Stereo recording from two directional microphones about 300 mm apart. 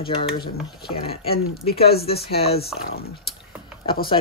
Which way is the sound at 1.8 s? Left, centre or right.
Left.